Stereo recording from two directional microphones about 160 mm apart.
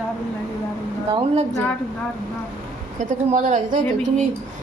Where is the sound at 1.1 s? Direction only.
40° right (ahead or behind).